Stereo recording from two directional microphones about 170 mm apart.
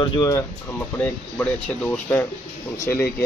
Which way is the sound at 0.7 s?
10° left (ahead or behind).